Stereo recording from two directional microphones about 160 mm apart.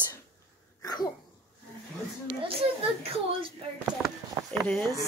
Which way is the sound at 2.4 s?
35° right (ahead or behind).